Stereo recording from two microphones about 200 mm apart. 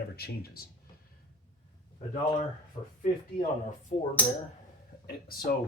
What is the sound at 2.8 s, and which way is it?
Speech, 25° left (ahead or behind).